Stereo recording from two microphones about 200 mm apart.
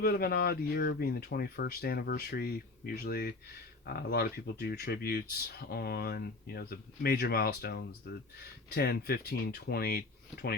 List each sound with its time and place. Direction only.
0.0 s speech: 50° left (ahead or behind)